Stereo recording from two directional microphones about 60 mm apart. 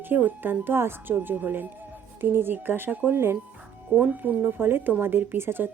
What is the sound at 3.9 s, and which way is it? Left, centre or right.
Speech, right.